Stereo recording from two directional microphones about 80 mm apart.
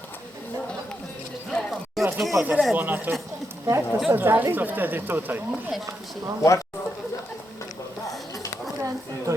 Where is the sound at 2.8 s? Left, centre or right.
Right.